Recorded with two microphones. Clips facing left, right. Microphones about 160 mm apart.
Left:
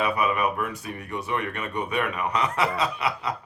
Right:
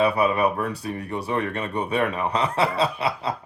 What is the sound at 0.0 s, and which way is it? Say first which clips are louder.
Speech: right 4 dB; 30° right (ahead or behind).